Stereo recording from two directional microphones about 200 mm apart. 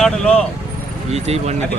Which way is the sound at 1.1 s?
30° right (ahead or behind).